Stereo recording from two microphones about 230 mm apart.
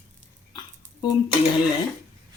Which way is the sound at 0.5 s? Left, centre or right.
Centre.